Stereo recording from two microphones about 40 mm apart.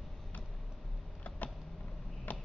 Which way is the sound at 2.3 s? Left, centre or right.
Left.